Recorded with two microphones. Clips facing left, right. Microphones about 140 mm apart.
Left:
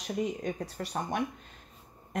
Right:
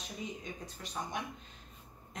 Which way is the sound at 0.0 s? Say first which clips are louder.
Left 11 dB; 65° left (ahead or behind).